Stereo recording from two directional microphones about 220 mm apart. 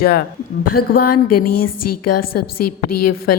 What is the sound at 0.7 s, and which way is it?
A woman's voice, 90° left.